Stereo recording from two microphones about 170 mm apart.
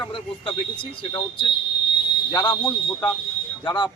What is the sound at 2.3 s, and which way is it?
A man's voice, 30° left (ahead or behind).